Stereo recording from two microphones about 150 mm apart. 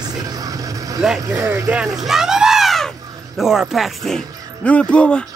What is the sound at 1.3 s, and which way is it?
Speech, 20° right (ahead or behind).